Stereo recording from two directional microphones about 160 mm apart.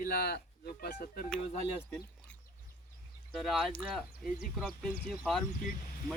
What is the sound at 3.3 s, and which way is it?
Speech, centre (ahead or behind).